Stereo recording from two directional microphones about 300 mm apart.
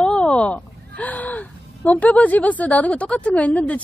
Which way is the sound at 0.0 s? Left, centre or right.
Centre.